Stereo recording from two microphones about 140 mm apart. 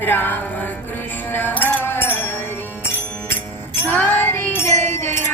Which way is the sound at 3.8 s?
15° left (ahead or behind).